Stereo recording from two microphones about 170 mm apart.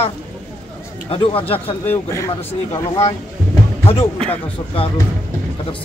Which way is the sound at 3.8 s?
35° left (ahead or behind).